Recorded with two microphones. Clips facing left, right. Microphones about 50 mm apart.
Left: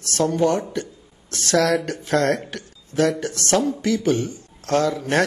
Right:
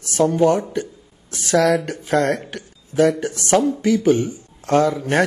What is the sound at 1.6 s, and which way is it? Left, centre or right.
A man's voice, centre.